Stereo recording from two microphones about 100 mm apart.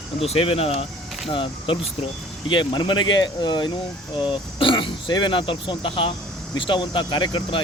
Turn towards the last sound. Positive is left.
turn(degrees=55)  # may be behind; listen again after turning